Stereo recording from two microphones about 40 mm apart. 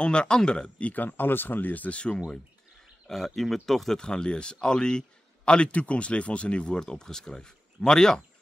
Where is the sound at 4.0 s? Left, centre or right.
Centre.